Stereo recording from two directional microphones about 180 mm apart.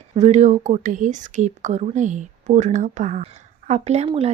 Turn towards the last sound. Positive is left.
turn(degrees=-35)  # may be behind; listen again after turning